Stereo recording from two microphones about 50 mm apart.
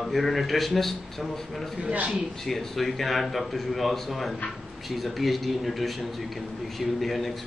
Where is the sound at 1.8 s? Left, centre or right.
Right.